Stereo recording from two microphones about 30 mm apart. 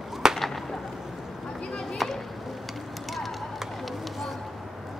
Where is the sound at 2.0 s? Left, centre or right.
Centre.